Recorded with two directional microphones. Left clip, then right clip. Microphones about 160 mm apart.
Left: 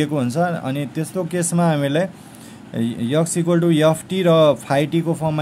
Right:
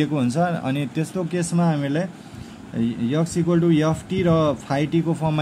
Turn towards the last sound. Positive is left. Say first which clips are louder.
# left 2 dB
turn(degrees=15)  # may be behind; listen again after turning